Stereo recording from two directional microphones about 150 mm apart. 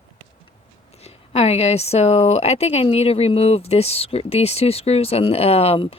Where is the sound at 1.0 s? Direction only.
40° left (ahead or behind).